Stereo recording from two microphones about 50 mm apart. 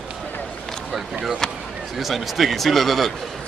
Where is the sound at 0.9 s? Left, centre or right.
Centre.